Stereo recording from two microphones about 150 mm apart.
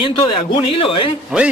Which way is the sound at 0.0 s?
35° left (ahead or behind).